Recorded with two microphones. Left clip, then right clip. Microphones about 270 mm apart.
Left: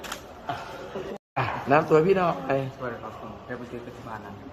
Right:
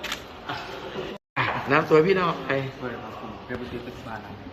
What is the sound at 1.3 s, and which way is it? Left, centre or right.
Speech, left.